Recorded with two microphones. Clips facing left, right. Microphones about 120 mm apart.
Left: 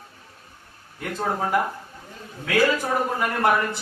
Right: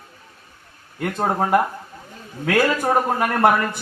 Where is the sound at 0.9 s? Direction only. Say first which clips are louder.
Right 5 dB; 60° right (ahead or behind).